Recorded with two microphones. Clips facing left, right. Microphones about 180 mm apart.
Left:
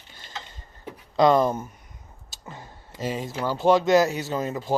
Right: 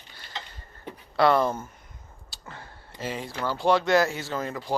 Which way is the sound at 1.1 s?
15° left (ahead or behind).